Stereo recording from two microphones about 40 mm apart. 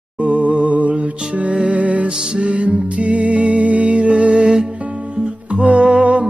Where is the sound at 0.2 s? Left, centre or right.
Right.